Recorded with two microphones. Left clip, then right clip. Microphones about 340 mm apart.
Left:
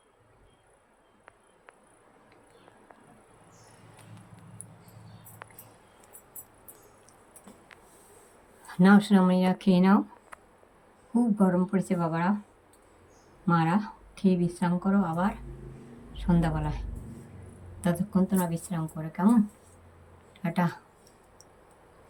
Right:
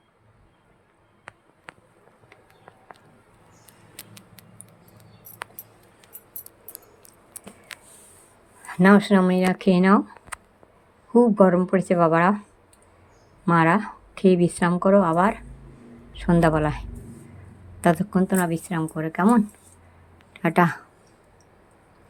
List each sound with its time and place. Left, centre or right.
8.6 s speech: centre
11.3 s speech: centre
13.4 s a woman's voice: centre
20.4 s speech: centre